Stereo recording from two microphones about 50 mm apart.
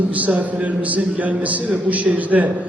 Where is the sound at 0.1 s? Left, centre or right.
Right.